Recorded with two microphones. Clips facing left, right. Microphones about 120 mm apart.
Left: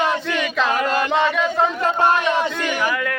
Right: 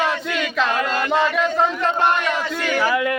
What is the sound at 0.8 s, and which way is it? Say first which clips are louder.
Battle cry: left 2 dB; 25° left (ahead or behind).